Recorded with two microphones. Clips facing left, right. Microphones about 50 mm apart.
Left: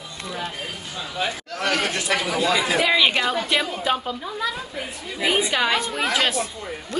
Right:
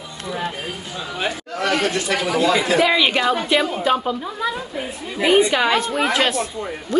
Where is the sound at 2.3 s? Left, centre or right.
Right.